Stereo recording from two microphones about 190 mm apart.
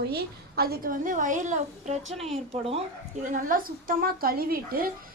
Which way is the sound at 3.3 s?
45° right (ahead or behind).